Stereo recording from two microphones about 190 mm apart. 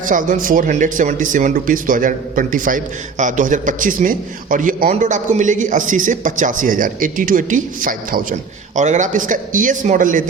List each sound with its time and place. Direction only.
0.0 s speech: 45° right (ahead or behind)